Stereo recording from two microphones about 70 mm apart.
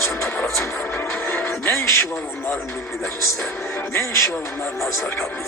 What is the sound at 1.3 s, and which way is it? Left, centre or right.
Music, left.